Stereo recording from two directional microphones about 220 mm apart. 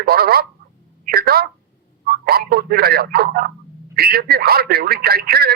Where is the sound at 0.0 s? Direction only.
45° right (ahead or behind).